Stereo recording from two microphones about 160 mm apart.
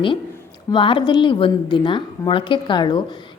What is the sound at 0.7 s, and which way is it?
A woman's voice, 30° left (ahead or behind).